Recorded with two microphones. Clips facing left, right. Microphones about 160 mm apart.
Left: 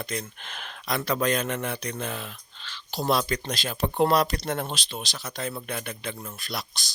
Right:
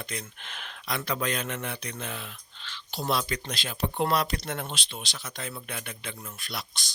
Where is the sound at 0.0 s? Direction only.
40° left (ahead or behind).